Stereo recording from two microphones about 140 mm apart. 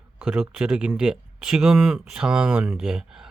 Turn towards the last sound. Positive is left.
turn(degrees=-5)  # may be behind; listen again after turning